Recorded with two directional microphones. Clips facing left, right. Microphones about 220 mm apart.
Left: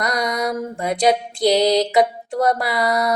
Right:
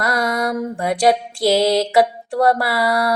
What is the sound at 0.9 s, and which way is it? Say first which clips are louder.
Mantra: right 1 dB; 20° left (ahead or behind).